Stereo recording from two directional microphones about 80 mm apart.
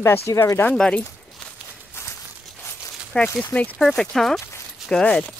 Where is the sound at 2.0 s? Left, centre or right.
Left.